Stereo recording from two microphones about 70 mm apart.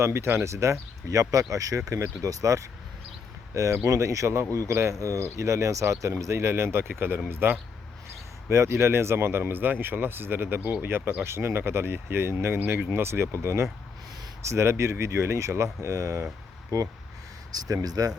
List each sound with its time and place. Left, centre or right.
0.0 s speech: right
17.5 s speech: right